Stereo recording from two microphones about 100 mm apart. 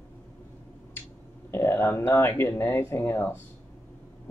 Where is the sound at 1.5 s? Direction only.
25° left (ahead or behind).